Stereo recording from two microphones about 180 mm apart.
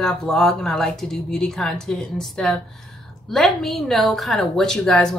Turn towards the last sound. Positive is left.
turn(degrees=5)  # may be behind; listen again after turning